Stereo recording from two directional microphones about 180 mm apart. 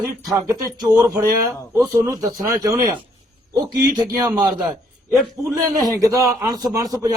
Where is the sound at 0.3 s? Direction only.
20° right (ahead or behind).